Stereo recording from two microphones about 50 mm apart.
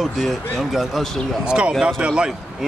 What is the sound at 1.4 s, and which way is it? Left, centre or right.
Speech, right.